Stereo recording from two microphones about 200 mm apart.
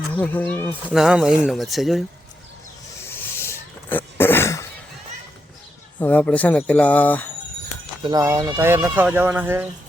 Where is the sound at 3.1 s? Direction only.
10° left (ahead or behind).